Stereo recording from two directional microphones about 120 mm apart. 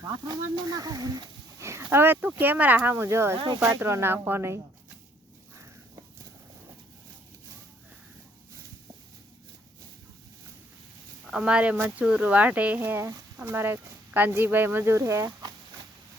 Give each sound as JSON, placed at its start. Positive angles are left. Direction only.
{"t": 0.0, "sound": "speech", "side_deg": -35}
{"t": 3.3, "sound": "speech", "side_deg": -40}
{"t": 3.6, "sound": "speech", "side_deg": -15}
{"t": 11.3, "sound": "speech", "side_deg": -5}